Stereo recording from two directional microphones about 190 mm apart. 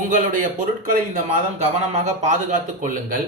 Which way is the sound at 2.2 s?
40° right (ahead or behind).